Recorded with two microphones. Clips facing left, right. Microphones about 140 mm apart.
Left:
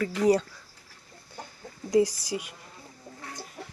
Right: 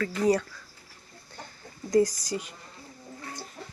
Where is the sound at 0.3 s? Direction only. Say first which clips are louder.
Left 2 dB; 20° left (ahead or behind).